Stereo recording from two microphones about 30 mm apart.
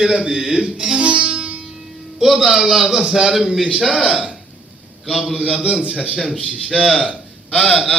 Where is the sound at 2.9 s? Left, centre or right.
Right.